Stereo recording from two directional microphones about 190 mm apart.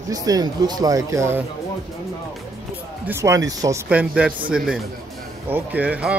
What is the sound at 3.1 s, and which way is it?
Speech, 15° right (ahead or behind).